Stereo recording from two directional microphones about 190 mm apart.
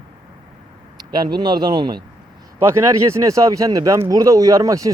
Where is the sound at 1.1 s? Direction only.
20° right (ahead or behind).